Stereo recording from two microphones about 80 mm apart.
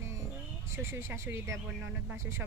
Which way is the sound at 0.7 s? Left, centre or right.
Right.